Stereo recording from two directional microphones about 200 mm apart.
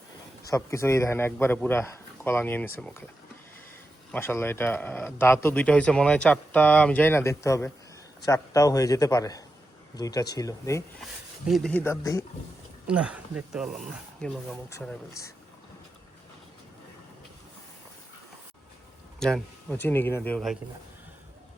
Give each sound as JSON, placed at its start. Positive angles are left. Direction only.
{"t": 0.4, "sound": "speech", "side_deg": 15}
{"t": 4.1, "sound": "speech", "side_deg": 10}
{"t": 11.4, "sound": "speech", "side_deg": 0}
{"t": 12.9, "sound": "speech", "side_deg": -5}
{"t": 19.2, "sound": "speech", "side_deg": 5}